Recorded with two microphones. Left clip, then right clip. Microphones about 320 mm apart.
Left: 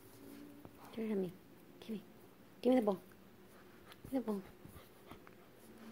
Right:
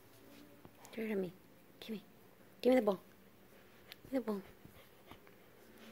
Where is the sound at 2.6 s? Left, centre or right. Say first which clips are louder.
Right 2 dB; centre.